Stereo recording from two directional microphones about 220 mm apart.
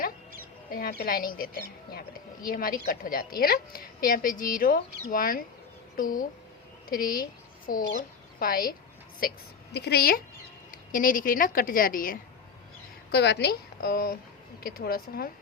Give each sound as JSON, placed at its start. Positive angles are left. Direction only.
{"t": 0.7, "sound": "a woman's voice", "side_deg": 45}